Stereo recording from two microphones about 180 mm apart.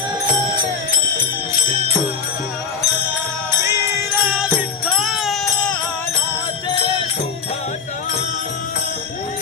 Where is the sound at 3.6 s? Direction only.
15° right (ahead or behind).